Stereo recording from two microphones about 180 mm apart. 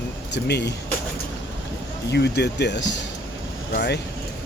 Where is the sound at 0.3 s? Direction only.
70° left (ahead or behind).